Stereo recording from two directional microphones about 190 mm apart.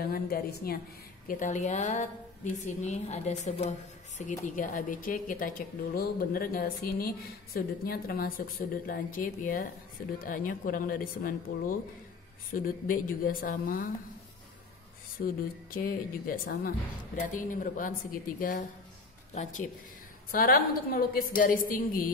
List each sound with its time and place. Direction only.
0.0 s a woman's voice: 55° left (ahead or behind)
15.7 s a woman's voice: 50° left (ahead or behind)
20.2 s speech: 50° left (ahead or behind)